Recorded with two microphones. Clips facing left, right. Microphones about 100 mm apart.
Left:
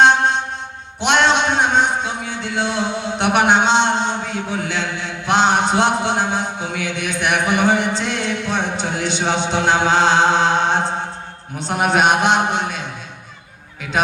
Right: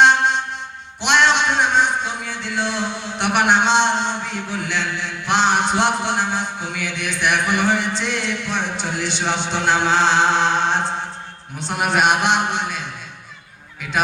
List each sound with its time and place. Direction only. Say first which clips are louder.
0.0 s music: left 1 dB; 20° left (ahead or behind)
1.2 s a sound: even; 20° left (ahead or behind)
4.4 s mantra: left 2 dB; 20° left (ahead or behind)
7.3 s a man's voice: left 2 dB; 20° left (ahead or behind)
7.9 s music: left 2 dB; 15° left (ahead or behind)
8.7 s speech: left 3 dB; 20° left (ahead or behind)
9.2 s chant: left 3 dB; 15° left (ahead or behind)
11.6 s a man's voice: left 2 dB; 20° left (ahead or behind)